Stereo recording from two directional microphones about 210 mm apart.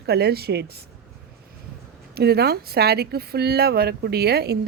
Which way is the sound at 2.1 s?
50° right (ahead or behind).